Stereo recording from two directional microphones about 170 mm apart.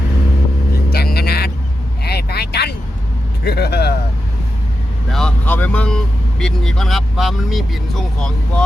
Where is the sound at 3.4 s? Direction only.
70° left (ahead or behind).